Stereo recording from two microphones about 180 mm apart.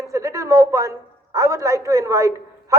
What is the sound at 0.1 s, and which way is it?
A woman's voice, 15° right (ahead or behind).